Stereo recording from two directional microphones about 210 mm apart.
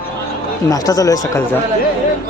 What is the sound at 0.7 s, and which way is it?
Speech, 15° left (ahead or behind).